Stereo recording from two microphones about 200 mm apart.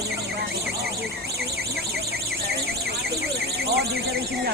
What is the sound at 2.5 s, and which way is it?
Alarm, 55° right (ahead or behind).